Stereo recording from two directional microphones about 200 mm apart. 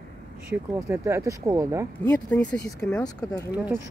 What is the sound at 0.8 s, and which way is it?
Speech, 15° right (ahead or behind).